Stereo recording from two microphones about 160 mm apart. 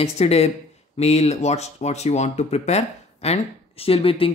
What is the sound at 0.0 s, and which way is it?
Speech, 40° left (ahead or behind).